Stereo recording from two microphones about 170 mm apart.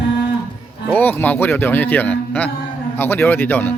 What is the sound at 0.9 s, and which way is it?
A man's voice, 10° left (ahead or behind).